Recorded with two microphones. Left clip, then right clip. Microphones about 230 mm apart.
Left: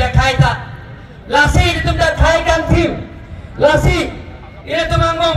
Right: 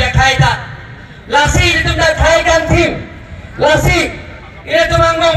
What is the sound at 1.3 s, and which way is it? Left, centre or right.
Music, left.